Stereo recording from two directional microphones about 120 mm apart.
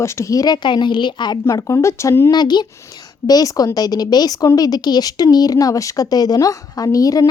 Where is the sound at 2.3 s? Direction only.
35° left (ahead or behind).